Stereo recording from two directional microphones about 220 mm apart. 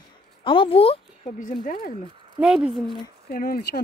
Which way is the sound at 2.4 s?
5° right (ahead or behind).